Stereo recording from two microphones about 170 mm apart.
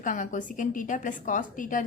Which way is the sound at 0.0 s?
50° left (ahead or behind).